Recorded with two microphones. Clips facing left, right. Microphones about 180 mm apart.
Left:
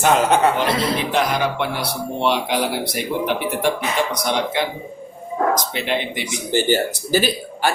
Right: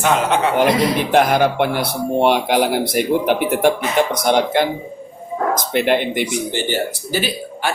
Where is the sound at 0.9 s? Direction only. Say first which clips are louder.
Right 5 dB; 55° right (ahead or behind).